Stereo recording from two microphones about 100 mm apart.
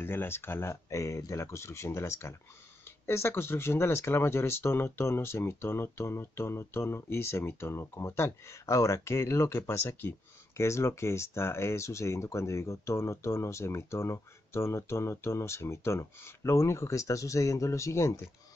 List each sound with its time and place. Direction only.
0.0 s speech: 25° left (ahead or behind)